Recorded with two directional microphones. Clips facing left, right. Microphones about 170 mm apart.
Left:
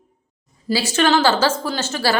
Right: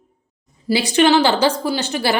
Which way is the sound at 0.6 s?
15° right (ahead or behind).